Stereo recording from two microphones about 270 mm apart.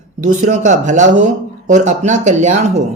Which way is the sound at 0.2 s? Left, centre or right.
Right.